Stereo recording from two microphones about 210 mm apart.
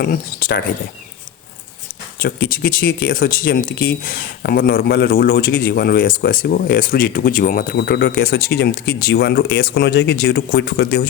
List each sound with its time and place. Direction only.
0.0 s speech: 45° left (ahead or behind)
2.1 s speech: 45° left (ahead or behind)